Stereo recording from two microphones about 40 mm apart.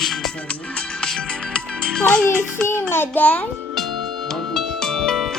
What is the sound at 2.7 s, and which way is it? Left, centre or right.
Speech, left.